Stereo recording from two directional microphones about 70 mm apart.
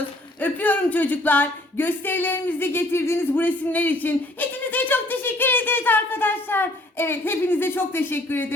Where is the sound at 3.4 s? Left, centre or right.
Left.